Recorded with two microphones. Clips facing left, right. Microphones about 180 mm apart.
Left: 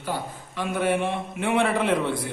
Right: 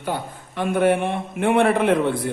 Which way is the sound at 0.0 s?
55° right (ahead or behind).